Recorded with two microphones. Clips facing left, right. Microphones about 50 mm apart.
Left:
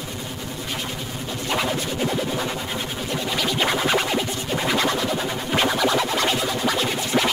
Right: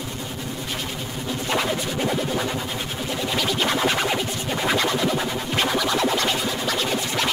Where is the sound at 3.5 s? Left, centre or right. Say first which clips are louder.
Left 2 dB; centre.